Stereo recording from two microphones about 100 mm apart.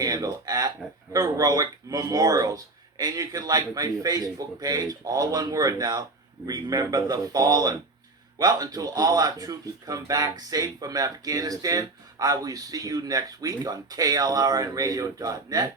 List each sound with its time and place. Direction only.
0.0 s speech: 40° right (ahead or behind)